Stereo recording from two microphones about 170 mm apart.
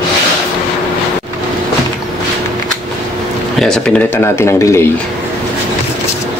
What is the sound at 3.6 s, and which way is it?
Speech, 5° left (ahead or behind).